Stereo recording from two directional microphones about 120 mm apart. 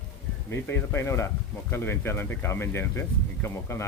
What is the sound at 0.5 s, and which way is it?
Speech, 15° left (ahead or behind).